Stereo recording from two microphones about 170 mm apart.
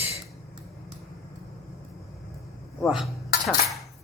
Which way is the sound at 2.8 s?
Centre (ahead or behind).